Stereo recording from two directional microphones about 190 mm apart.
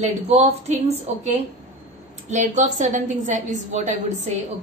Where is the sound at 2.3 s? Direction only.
40° right (ahead or behind).